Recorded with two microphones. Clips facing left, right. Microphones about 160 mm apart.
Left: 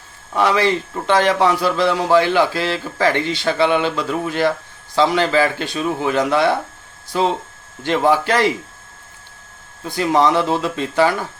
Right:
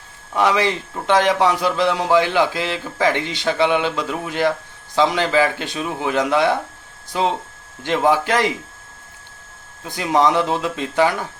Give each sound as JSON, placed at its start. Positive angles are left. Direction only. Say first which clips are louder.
{"t": 0.3, "sound": "a man's voice", "louder": "left 1 dB", "side_deg": -15}
{"t": 9.8, "sound": "a man's voice", "louder": "left 1 dB", "side_deg": -15}